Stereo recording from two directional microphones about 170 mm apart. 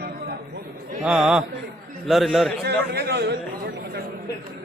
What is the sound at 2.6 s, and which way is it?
Speech, 75° right (ahead or behind).